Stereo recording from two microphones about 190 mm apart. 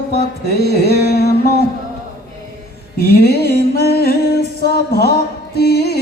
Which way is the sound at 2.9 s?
55° left (ahead or behind).